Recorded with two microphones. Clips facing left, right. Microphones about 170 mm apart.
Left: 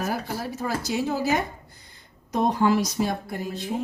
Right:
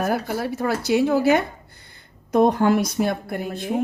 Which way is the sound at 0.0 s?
60° right (ahead or behind).